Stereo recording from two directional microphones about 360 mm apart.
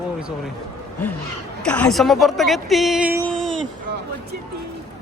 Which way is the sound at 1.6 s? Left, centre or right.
Centre.